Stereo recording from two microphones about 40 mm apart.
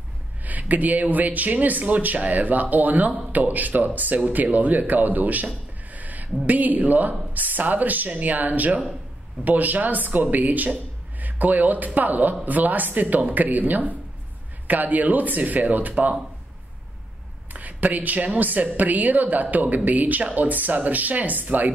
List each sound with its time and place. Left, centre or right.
0.4 s speech: right
5.9 s a sound: right
6.4 s speech: right
17.5 s speech: right